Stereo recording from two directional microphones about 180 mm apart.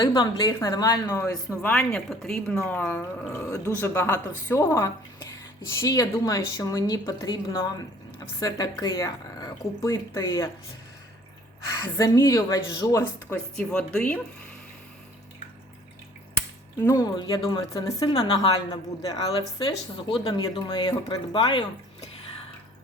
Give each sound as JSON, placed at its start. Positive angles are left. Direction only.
{"t": 0.0, "sound": "speech", "side_deg": 25}
{"t": 1.6, "sound": "speech", "side_deg": 5}
{"t": 11.9, "sound": "speech", "side_deg": 20}
{"t": 16.8, "sound": "speech", "side_deg": 20}